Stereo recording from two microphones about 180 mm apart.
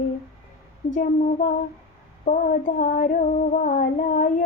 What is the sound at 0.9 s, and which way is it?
Female singing, 40° left (ahead or behind).